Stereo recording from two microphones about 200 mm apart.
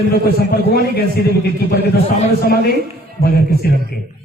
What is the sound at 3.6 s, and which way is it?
Speech, 50° left (ahead or behind).